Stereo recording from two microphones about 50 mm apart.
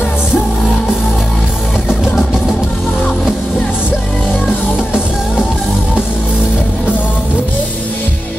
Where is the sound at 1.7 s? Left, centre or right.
Centre.